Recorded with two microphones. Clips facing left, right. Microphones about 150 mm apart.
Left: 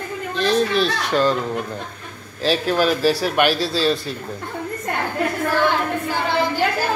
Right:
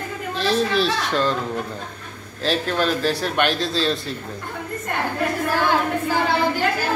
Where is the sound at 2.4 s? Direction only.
5° left (ahead or behind).